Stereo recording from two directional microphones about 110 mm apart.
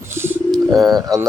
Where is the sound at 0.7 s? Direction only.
35° right (ahead or behind).